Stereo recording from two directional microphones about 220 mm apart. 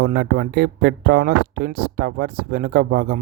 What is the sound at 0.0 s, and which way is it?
Speech, 45° right (ahead or behind).